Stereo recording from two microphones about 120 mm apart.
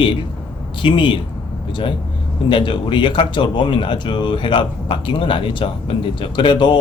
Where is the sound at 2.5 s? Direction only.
40° left (ahead or behind).